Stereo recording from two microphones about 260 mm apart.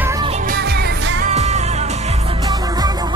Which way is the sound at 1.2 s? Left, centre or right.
Right.